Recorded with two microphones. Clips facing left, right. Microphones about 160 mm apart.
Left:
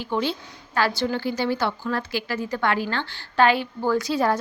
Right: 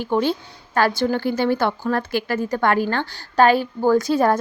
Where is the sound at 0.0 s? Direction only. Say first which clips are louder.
Right 5 dB; 50° right (ahead or behind).